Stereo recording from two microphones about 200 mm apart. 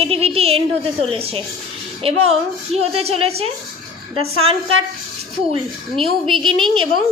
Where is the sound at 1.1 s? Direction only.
30° right (ahead or behind).